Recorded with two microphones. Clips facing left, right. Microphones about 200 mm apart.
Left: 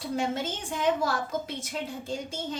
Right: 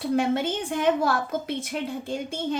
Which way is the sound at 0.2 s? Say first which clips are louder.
Right 6 dB; 60° right (ahead or behind).